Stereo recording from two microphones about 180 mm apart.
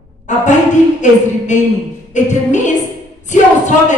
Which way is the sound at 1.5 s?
40° left (ahead or behind).